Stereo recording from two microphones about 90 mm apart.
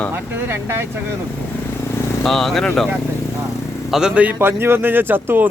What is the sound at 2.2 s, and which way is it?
Speech, 5° left (ahead or behind).